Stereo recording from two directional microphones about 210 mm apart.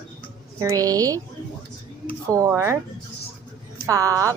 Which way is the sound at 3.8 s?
15° right (ahead or behind).